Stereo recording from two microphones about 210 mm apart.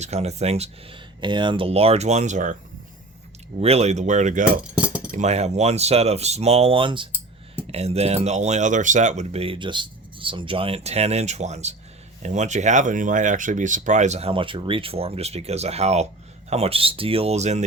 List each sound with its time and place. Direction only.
0.0 s speech: 30° right (ahead or behind)
3.6 s speech: 30° right (ahead or behind)
4.6 s keys jangling: 5° right (ahead or behind)
5.1 s speech: 30° right (ahead or behind)